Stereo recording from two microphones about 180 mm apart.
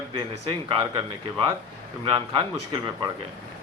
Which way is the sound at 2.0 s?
30° right (ahead or behind).